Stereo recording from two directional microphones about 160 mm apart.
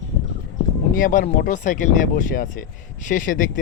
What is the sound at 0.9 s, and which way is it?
Speech, 60° left (ahead or behind).